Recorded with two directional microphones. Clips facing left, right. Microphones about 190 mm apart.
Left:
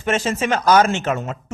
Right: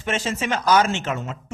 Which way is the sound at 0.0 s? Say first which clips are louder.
Left 5 dB; 50° left (ahead or behind).